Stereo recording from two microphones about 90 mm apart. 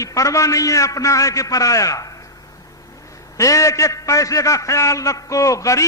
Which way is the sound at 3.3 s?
35° left (ahead or behind).